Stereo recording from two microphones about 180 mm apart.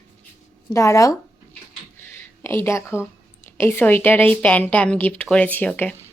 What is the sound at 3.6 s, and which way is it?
Speech, 10° left (ahead or behind).